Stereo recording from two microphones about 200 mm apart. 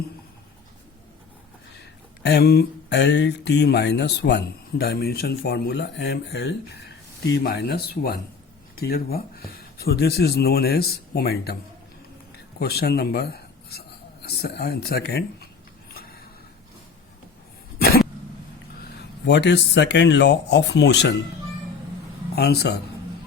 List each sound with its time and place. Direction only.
1.8 s speech: 55° left (ahead or behind)
12.5 s speech: 55° left (ahead or behind)
17.7 s cough: 50° left (ahead or behind)
19.2 s speech: 60° left (ahead or behind)
22.4 s speech: 55° left (ahead or behind)